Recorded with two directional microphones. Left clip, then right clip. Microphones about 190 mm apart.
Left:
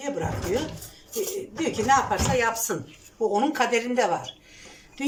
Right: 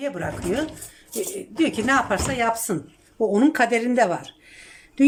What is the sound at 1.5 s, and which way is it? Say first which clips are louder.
Cutlery: right 1 dB; 55° right (ahead or behind).